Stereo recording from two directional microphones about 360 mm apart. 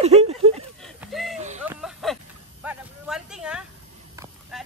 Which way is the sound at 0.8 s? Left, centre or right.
Centre.